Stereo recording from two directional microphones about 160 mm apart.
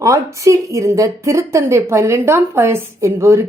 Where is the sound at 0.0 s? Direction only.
20° right (ahead or behind).